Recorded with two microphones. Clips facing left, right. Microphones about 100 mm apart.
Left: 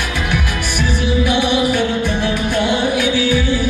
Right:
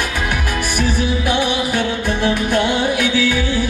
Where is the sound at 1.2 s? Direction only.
50° right (ahead or behind).